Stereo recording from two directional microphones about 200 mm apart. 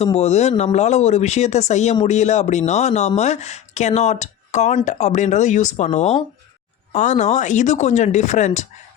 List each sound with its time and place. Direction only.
0.0 s speech: 30° left (ahead or behind)